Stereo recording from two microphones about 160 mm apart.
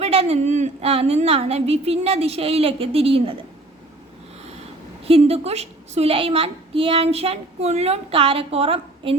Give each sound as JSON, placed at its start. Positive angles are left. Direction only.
{"t": 0.0, "sound": "a woman's voice", "side_deg": -40}
{"t": 5.0, "sound": "a woman's voice", "side_deg": -40}